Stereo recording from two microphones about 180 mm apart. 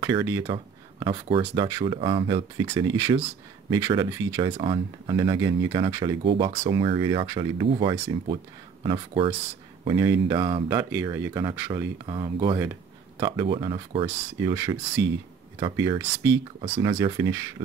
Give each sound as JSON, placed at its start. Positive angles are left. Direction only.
{"t": 0.0, "sound": "speech", "side_deg": -20}
{"t": 14.5, "sound": "speech", "side_deg": -15}
{"t": 16.6, "sound": "speech", "side_deg": -35}
{"t": 17.0, "sound": "speech", "side_deg": -20}